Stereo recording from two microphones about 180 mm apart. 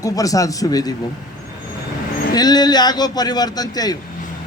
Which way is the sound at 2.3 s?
20° left (ahead or behind).